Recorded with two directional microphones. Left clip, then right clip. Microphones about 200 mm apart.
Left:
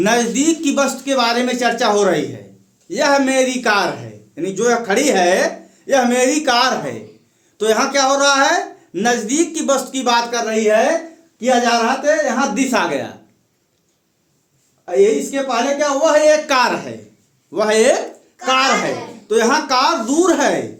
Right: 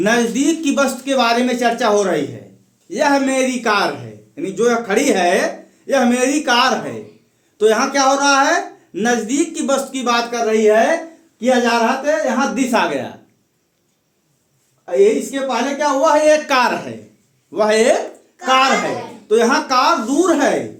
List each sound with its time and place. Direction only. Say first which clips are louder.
0.0 s a woman's voice: even; 25° left (ahead or behind)
0.6 s a woman's voice: even; 5° left (ahead or behind)
12.0 s speech: left 1 dB; 10° left (ahead or behind)
14.8 s a woman's voice: even; 10° left (ahead or behind)